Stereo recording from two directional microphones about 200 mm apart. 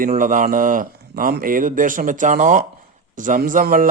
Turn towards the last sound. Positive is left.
turn(degrees=-45)  # may be behind; listen again after turning